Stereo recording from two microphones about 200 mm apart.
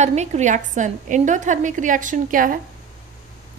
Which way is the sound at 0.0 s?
35° right (ahead or behind).